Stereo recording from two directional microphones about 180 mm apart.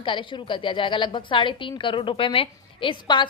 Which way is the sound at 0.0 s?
30° left (ahead or behind).